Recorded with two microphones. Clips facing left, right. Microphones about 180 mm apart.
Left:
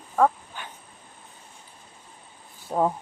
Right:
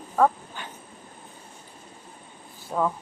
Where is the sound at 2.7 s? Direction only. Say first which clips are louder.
Left 2 dB; 35° left (ahead or behind).